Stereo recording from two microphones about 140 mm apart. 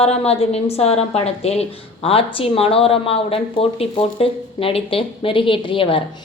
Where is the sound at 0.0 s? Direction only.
45° left (ahead or behind).